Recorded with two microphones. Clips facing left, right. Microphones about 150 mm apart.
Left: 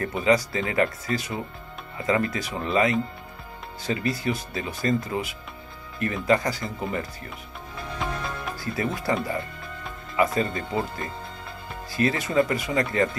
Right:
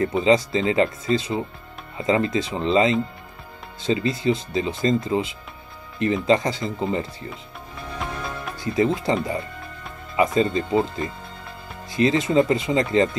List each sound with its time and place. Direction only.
0.0 s speech: 25° right (ahead or behind)
8.5 s speech: 20° right (ahead or behind)